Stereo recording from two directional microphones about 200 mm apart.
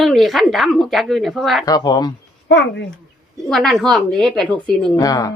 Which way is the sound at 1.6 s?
20° left (ahead or behind).